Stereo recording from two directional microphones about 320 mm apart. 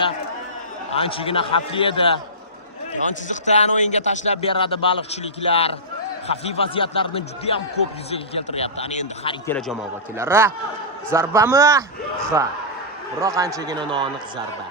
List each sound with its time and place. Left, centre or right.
0.9 s speech: centre
3.2 s a man's voice: left
9.5 s a man's voice: centre